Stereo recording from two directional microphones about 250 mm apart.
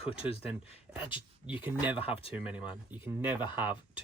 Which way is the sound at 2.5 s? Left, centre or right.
Centre.